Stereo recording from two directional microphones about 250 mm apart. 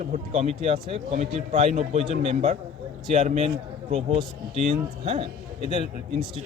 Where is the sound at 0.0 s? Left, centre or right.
Right.